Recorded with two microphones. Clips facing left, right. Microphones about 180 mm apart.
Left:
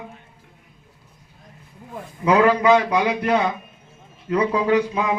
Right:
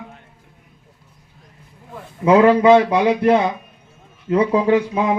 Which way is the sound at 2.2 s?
25° right (ahead or behind).